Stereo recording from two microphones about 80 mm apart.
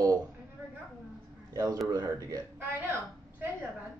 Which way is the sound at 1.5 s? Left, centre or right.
Right.